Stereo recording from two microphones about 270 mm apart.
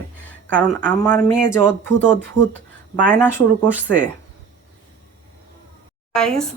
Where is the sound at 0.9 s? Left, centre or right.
Centre.